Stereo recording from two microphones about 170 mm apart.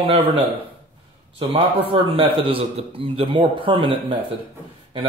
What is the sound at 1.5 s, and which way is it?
A man's voice, 35° right (ahead or behind).